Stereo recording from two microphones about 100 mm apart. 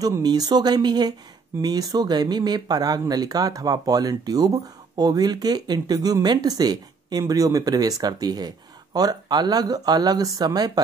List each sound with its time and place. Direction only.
0.0 s speech: 40° right (ahead or behind)